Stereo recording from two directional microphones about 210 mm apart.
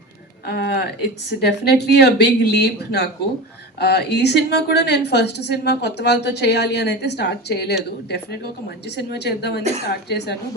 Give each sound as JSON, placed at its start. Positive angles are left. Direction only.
{"t": 0.4, "sound": "a woman's voice", "side_deg": 50}